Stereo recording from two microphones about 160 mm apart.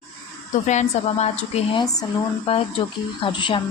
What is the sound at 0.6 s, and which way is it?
A woman's voice, 45° left (ahead or behind).